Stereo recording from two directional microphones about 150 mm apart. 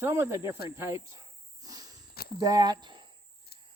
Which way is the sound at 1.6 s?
25° right (ahead or behind).